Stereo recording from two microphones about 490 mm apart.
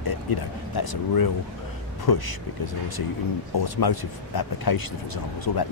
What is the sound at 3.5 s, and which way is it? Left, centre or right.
Speech, left.